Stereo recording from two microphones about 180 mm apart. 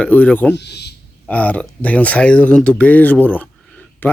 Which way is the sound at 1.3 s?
10° left (ahead or behind).